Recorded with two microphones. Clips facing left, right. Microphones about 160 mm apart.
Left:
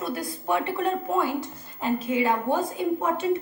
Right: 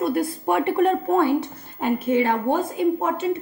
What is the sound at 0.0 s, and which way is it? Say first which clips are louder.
A woman's voice: right 8 dB; 55° right (ahead or behind).